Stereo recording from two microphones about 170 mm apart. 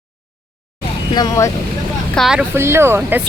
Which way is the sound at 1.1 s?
25° left (ahead or behind).